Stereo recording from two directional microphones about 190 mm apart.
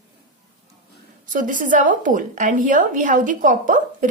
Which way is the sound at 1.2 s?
45° right (ahead or behind).